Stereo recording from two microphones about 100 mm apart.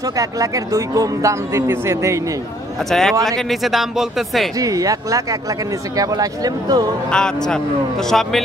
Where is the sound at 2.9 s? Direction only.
5° left (ahead or behind).